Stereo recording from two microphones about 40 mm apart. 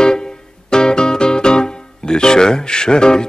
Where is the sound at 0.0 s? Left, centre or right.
Centre.